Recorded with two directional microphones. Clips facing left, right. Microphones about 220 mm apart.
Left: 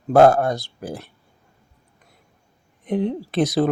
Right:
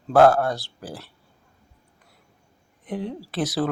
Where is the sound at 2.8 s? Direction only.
25° left (ahead or behind).